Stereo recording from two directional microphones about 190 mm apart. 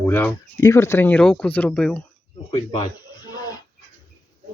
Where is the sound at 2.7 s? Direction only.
20° left (ahead or behind).